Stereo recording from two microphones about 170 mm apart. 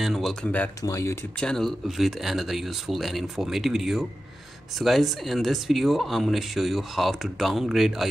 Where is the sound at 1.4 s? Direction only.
5° left (ahead or behind).